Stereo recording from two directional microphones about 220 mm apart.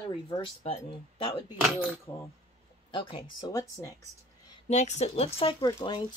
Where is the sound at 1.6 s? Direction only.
5° right (ahead or behind).